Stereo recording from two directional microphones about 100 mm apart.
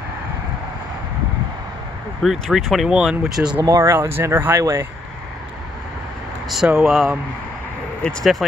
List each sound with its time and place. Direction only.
2.2 s speech: centre (ahead or behind)
3.6 s speech: 30° right (ahead or behind)
6.5 s speech: 5° right (ahead or behind)
8.0 s speech: 5° left (ahead or behind)